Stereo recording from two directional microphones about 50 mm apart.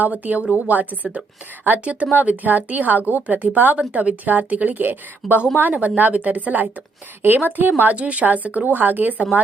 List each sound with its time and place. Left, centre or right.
0.0 s a woman's voice: right
7.9 s a woman's voice: right